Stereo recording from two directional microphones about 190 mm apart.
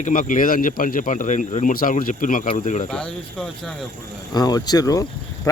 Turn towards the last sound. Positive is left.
turn(degrees=20)  # may be behind; listen again after turning